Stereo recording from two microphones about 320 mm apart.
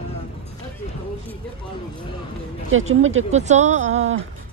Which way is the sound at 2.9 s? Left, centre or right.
Right.